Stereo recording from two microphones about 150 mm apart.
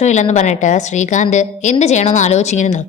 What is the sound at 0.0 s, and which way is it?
A woman's voice, 50° left (ahead or behind).